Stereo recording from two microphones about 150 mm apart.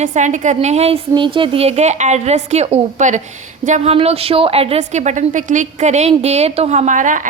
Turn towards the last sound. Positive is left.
turn(degrees=-60)  # may be behind; listen again after turning